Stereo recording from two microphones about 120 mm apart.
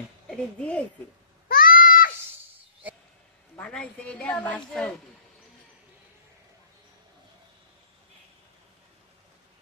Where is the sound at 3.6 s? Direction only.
10° left (ahead or behind).